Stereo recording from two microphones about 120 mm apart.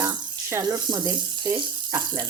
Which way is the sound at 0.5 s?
35° right (ahead or behind).